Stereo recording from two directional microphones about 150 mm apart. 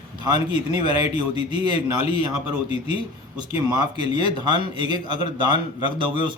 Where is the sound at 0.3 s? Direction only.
30° right (ahead or behind).